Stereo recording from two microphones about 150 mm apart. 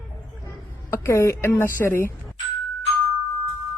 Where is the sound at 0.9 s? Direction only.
20° left (ahead or behind).